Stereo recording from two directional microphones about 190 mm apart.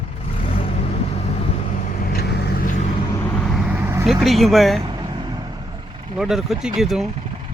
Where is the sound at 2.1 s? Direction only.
55° left (ahead or behind).